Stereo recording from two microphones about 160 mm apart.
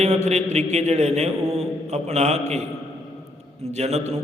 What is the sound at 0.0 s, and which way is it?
A man's voice, 45° right (ahead or behind).